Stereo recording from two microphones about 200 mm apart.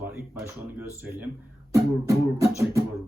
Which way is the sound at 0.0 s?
10° right (ahead or behind).